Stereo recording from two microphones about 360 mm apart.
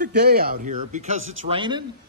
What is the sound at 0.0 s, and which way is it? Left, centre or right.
A woman's voice, right.